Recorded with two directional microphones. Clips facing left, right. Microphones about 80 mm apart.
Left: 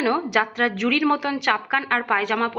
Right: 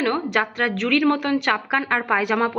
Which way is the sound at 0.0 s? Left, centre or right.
Centre.